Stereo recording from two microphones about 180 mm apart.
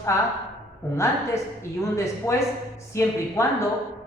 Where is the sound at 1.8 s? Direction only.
15° left (ahead or behind).